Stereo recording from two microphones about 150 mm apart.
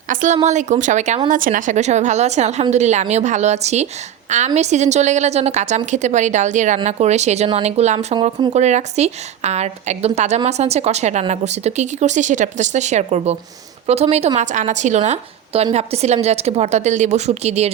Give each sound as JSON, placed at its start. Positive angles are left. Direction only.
{"t": 0.1, "sound": "a woman's voice", "side_deg": -60}
{"t": 1.3, "sound": "a woman's voice", "side_deg": -60}
{"t": 8.5, "sound": "a woman's voice", "side_deg": -50}